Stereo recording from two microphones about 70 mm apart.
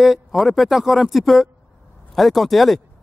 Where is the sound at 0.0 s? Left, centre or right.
Centre.